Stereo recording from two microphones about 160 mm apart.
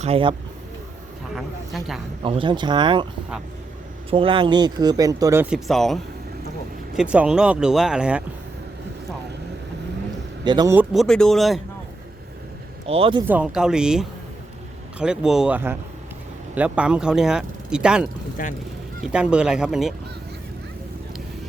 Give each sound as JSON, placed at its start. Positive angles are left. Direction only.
{"t": 0.0, "sound": "speech", "side_deg": -35}
{"t": 1.4, "sound": "speech", "side_deg": 0}
{"t": 2.2, "sound": "speech", "side_deg": -30}
{"t": 4.1, "sound": "speech", "side_deg": -35}
{"t": 5.5, "sound": "speech", "side_deg": 0}
{"t": 10.4, "sound": "a man's voice", "side_deg": -25}
{"t": 10.9, "sound": "speech", "side_deg": 5}
{"t": 12.8, "sound": "speech", "side_deg": -35}
{"t": 13.2, "sound": "speech", "side_deg": -5}
{"t": 18.4, "sound": "speech", "side_deg": 55}
{"t": 19.1, "sound": "speech", "side_deg": -5}